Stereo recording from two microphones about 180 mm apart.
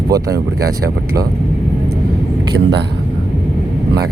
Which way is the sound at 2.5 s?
65° right (ahead or behind).